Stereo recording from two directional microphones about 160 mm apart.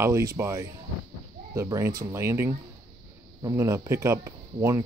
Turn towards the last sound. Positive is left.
turn(degrees=-20)  # may be behind; listen again after turning